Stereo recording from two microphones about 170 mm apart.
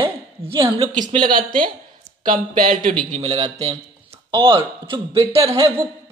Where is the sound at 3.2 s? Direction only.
40° right (ahead or behind).